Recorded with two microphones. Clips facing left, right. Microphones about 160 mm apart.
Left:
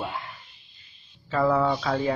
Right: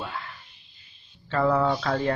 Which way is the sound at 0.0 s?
20° left (ahead or behind).